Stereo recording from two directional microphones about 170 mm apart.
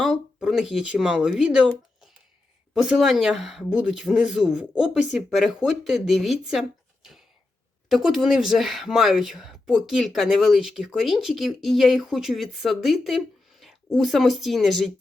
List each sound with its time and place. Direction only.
0.0 s speech: centre (ahead or behind)